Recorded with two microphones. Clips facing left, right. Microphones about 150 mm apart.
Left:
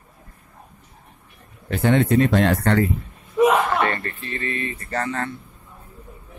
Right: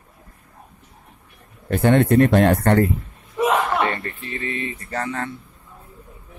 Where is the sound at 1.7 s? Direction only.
55° right (ahead or behind).